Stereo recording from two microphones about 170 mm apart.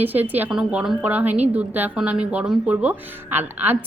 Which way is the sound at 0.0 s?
10° right (ahead or behind).